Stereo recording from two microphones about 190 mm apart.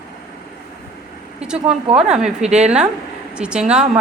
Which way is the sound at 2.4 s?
35° right (ahead or behind).